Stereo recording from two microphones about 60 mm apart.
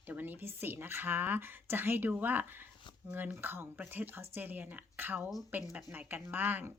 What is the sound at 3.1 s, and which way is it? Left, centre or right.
Speech, right.